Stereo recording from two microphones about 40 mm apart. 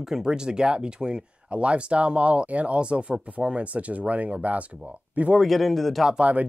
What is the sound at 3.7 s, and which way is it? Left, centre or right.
Speech, right.